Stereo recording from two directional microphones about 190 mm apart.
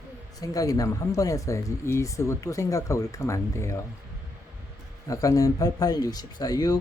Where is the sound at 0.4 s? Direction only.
20° left (ahead or behind).